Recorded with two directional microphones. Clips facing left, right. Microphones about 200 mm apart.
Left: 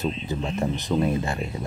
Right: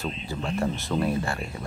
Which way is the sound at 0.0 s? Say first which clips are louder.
Left 4 dB; 20° left (ahead or behind).